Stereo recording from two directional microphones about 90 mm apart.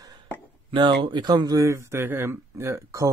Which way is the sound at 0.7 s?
65° right (ahead or behind).